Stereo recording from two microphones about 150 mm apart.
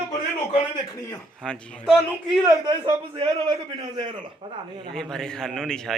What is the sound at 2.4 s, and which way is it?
A man's voice, 25° right (ahead or behind).